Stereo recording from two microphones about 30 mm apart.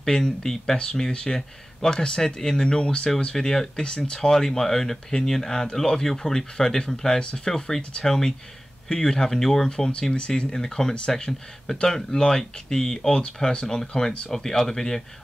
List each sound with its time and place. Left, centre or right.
0.0 s speech: centre
3.3 s speech: left
9.7 s speech: left